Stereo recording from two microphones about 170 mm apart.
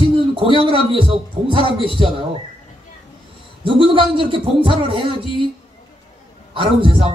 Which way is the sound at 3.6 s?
30° right (ahead or behind).